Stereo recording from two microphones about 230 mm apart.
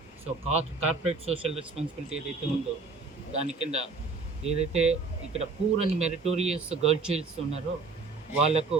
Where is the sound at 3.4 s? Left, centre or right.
Right.